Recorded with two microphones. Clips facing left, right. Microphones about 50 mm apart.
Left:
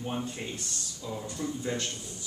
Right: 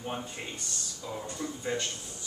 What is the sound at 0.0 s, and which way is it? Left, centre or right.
Speech, centre.